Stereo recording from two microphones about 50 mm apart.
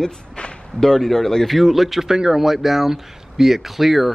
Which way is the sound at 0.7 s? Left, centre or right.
Centre.